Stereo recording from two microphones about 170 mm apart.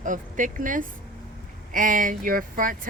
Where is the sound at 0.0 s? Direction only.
50° right (ahead or behind).